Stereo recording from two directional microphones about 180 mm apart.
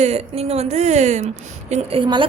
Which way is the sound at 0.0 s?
35° right (ahead or behind).